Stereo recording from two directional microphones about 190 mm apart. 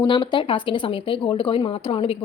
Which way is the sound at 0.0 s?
25° left (ahead or behind).